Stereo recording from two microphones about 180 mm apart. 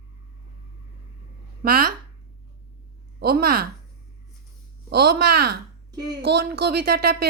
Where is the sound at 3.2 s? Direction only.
55° right (ahead or behind).